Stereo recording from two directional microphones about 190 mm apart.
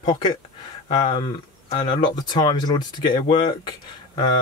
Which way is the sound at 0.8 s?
25° left (ahead or behind).